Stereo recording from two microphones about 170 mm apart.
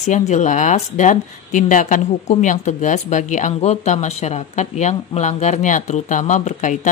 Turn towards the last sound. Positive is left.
turn(degrees=50)  # may be behind; listen again after turning